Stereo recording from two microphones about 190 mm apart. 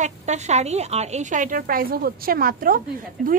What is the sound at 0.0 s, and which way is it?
A woman's voice, 35° right (ahead or behind).